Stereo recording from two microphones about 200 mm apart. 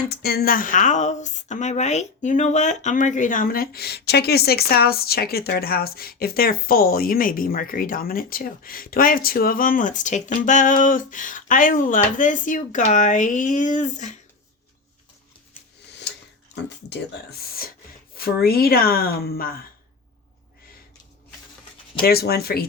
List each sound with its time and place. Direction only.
0.1 s a woman's voice: 50° left (ahead or behind)
16.6 s a woman's voice: 55° left (ahead or behind)
22.0 s a woman's voice: 50° left (ahead or behind)